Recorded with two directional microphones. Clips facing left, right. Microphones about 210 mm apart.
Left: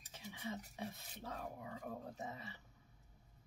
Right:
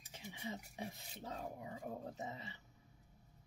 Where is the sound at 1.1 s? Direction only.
20° right (ahead or behind).